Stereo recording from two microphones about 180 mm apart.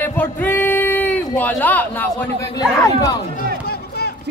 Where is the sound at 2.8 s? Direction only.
20° left (ahead or behind).